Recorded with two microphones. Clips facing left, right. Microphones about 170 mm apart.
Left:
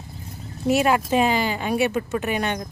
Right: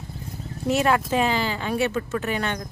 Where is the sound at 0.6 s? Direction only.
10° left (ahead or behind).